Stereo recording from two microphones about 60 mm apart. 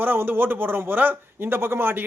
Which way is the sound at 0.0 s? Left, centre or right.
Right.